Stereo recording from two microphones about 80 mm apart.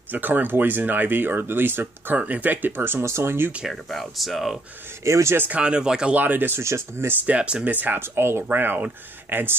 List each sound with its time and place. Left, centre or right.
0.1 s speech: right
3.7 s speech: centre
5.0 s speech: right
5.5 s speech: centre; by 7.2 s right
7.2 s speech: centre